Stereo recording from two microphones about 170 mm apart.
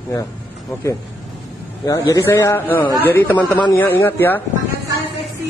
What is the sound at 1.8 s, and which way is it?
A man's voice, 20° left (ahead or behind).